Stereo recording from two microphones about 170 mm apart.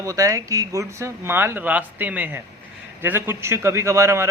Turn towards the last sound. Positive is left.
turn(degrees=-15)  # may be behind; listen again after turning